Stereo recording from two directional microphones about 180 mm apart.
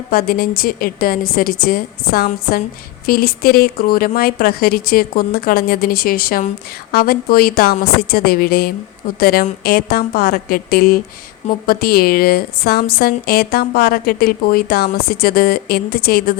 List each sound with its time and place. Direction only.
0.1 s a woman's voice: 55° left (ahead or behind)